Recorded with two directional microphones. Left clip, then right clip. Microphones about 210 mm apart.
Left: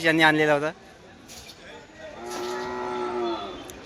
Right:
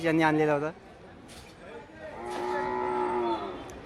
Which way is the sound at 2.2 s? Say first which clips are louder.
Even; 40° left (ahead or behind).